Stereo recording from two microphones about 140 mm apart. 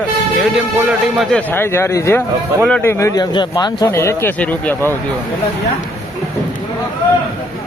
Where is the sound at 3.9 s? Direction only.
20° left (ahead or behind).